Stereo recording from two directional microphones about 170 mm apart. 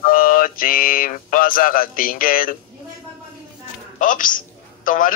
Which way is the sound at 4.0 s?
50° left (ahead or behind).